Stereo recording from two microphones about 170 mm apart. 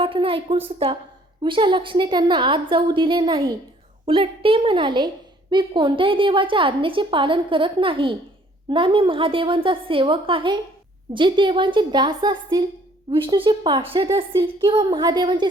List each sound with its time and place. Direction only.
0.0 s a woman's voice: 30° right (ahead or behind)